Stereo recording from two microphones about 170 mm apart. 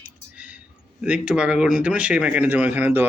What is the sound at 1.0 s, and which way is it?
Speech, 5° right (ahead or behind).